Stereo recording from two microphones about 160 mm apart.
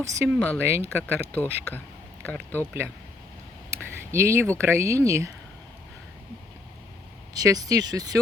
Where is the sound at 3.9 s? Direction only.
15° right (ahead or behind).